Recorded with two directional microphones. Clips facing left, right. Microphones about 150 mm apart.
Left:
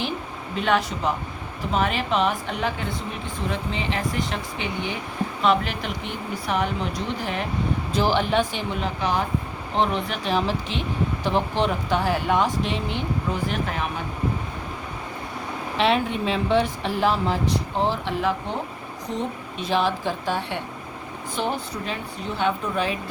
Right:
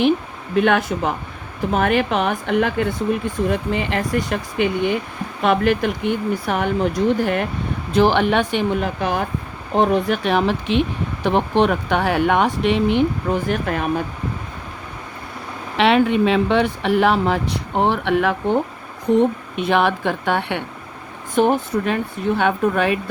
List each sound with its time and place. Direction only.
0.5 s speech: 55° right (ahead or behind)
15.8 s speech: 70° right (ahead or behind)
21.3 s speech: 50° right (ahead or behind)